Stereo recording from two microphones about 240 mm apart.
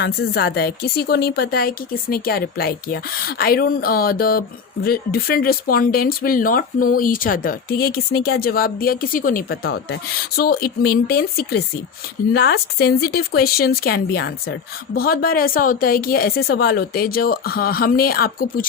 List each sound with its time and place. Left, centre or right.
0.0 s a woman's voice: left